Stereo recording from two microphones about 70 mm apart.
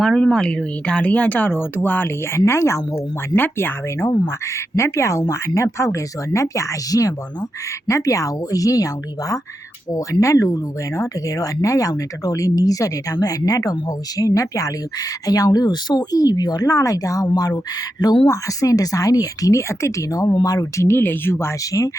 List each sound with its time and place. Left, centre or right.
0.0 s speech: centre; by 2.4 s left
2.5 s speech: left
3.3 s speech: left
9.9 s speech: left
15.3 s speech: left
18.3 s speech: left
20.8 s speech: left
21.6 s speech: left